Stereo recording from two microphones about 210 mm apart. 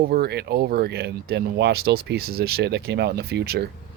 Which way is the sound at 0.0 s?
45° right (ahead or behind).